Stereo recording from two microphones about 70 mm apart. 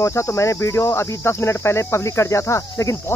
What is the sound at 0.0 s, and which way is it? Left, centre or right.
Cricket, left.